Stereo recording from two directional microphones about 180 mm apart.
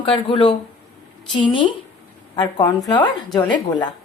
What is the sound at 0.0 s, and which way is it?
A woman's voice, 30° left (ahead or behind).